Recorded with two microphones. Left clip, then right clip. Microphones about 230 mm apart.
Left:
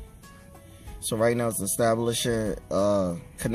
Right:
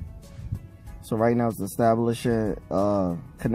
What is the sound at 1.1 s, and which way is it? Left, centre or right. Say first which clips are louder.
Speech: right 1 dB; centre.